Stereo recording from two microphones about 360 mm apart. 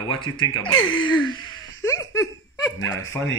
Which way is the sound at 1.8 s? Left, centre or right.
Centre.